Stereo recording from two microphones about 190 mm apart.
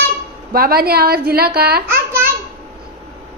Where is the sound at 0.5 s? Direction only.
50° right (ahead or behind).